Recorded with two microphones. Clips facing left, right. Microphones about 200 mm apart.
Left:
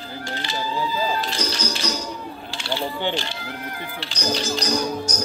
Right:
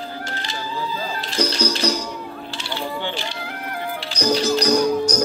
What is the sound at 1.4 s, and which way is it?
Music, 60° right (ahead or behind).